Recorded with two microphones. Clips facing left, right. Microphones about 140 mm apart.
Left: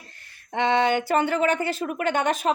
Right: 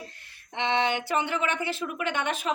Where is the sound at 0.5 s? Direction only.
45° left (ahead or behind).